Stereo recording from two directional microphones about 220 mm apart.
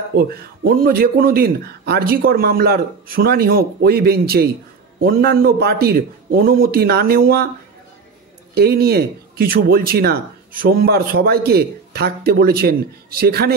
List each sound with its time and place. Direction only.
0.1 s speech: 45° right (ahead or behind)
8.5 s speech: 45° right (ahead or behind)